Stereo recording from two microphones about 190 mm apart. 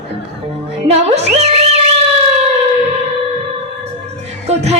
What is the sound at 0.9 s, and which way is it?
Music, 35° right (ahead or behind).